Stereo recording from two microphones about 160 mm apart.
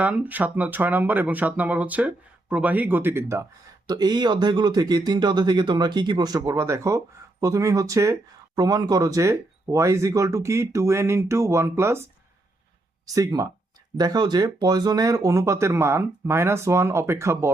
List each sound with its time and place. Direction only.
0.0 s speech: 10° right (ahead or behind)
13.1 s speech: 20° right (ahead or behind)